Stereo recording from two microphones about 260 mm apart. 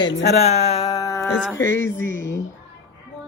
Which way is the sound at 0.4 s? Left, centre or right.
Left.